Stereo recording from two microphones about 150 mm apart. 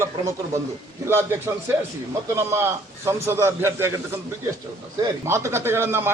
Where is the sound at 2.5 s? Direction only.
15° right (ahead or behind).